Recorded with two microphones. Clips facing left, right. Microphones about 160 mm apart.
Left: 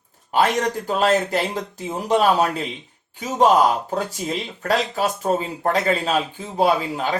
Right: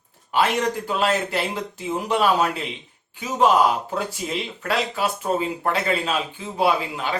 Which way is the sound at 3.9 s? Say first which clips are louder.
Left 2 dB; 40° left (ahead or behind).